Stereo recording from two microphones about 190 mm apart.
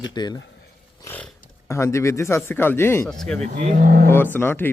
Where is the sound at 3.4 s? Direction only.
40° right (ahead or behind).